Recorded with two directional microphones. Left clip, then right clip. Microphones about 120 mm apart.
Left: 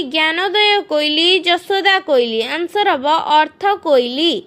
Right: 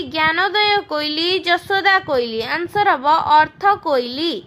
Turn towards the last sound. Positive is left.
turn(degrees=40)  # may be behind; listen again after turning